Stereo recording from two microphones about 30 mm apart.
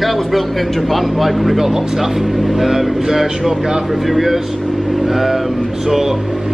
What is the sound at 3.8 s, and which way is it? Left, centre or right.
Speech, centre.